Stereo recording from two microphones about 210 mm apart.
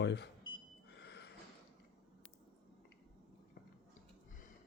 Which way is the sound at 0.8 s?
50° left (ahead or behind).